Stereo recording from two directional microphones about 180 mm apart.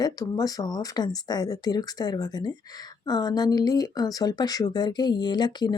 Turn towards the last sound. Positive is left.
turn(degrees=25)  # may be behind; listen again after turning